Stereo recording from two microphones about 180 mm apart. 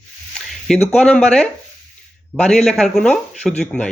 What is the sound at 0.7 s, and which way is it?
Speech, 5° left (ahead or behind).